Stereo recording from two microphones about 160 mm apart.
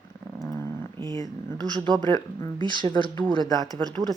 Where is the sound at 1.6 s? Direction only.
30° right (ahead or behind).